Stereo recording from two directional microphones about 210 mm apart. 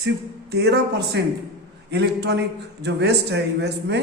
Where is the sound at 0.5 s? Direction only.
50° right (ahead or behind).